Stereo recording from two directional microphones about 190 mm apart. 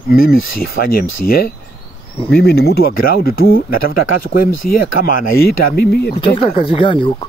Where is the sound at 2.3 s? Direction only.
60° left (ahead or behind).